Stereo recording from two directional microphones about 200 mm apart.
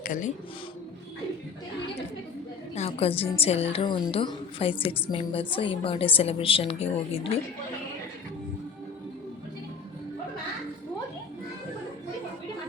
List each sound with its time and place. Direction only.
0.0 s speech: 40° left (ahead or behind)
2.7 s a sound: 30° left (ahead or behind)
3.4 s a woman's voice: 30° left (ahead or behind)